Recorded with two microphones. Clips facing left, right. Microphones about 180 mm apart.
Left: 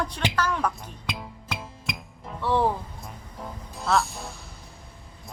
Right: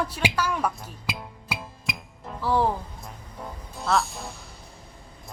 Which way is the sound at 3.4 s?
Centre (ahead or behind).